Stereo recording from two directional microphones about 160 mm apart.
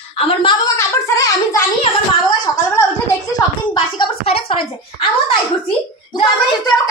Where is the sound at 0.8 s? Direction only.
20° left (ahead or behind).